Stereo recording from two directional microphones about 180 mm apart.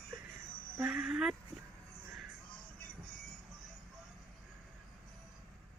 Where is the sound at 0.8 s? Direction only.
5° right (ahead or behind).